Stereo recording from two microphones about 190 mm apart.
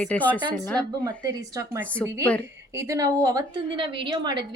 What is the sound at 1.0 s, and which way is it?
Speech, 20° right (ahead or behind).